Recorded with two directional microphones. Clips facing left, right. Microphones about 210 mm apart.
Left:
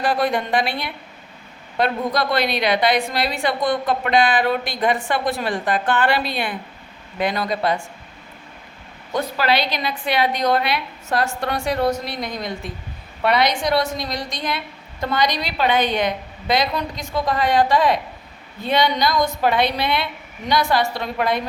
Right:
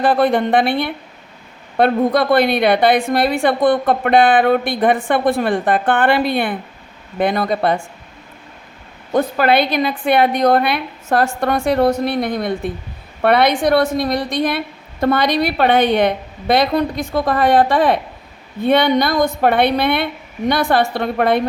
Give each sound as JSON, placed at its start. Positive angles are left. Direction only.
{"t": 0.0, "sound": "a woman's voice", "side_deg": -55}
{"t": 9.1, "sound": "a woman's voice", "side_deg": -55}